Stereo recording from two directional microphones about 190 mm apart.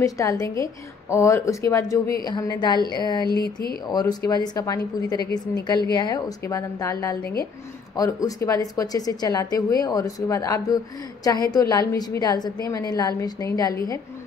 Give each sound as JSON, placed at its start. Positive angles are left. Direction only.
{"t": 0.0, "sound": "a woman's voice", "side_deg": 15}
{"t": 3.4, "sound": "speech", "side_deg": 50}
{"t": 3.8, "sound": "a woman's voice", "side_deg": 20}